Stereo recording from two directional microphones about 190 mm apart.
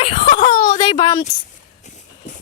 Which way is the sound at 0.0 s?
40° left (ahead or behind).